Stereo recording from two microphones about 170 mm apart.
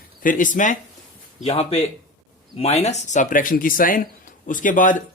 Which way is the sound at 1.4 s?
35° left (ahead or behind).